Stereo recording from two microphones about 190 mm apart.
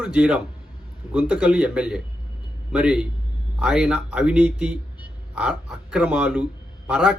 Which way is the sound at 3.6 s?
5° right (ahead or behind).